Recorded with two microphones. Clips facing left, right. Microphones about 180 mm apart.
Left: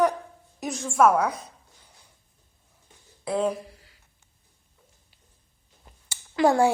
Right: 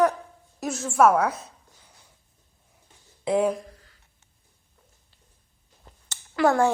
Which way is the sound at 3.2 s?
20° right (ahead or behind).